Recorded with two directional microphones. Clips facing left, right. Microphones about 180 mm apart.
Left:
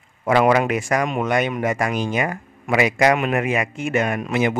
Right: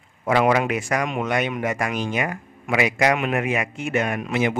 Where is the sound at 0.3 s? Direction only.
45° left (ahead or behind).